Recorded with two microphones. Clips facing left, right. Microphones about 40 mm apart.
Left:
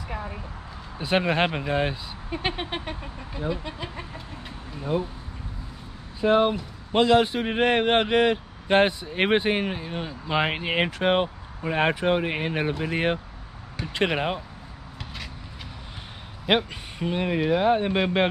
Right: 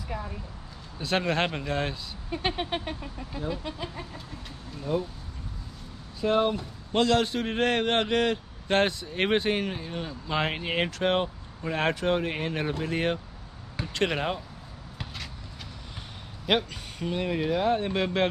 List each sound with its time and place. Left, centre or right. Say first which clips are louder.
0.1 s a man's voice: left 1 dB; left
6.2 s a man's voice: left 4 dB; left
16.4 s a man's voice: left 3 dB; centre